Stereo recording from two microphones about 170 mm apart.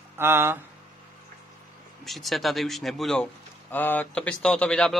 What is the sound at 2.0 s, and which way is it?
Speech, centre (ahead or behind).